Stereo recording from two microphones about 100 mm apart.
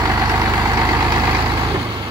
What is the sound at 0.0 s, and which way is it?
Vehicle, 35° right (ahead or behind).